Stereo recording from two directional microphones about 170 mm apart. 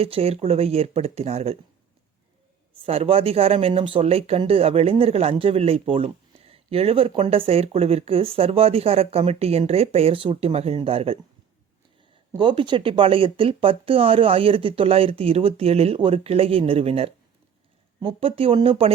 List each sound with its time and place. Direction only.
0.0 s speech: 35° right (ahead or behind)
2.8 s speech: 35° right (ahead or behind)
12.4 s speech: 30° right (ahead or behind)